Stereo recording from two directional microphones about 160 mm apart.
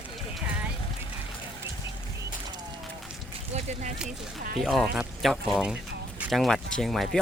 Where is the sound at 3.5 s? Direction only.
45° right (ahead or behind).